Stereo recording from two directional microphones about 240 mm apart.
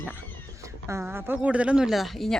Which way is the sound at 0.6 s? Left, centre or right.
Centre.